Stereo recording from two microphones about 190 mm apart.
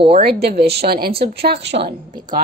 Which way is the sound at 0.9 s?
55° right (ahead or behind).